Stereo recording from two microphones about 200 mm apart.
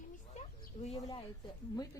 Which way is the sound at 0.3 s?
35° left (ahead or behind).